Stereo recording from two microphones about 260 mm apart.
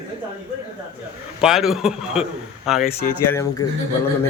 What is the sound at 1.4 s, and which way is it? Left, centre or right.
A man's voice, centre.